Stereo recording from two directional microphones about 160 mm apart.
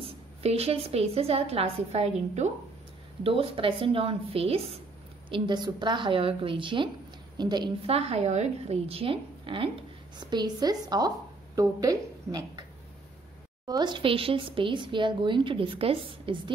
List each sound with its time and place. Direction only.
0.0 s speech: 40° right (ahead or behind)
5.3 s a woman's voice: 30° right (ahead or behind)
13.7 s speech: 25° right (ahead or behind)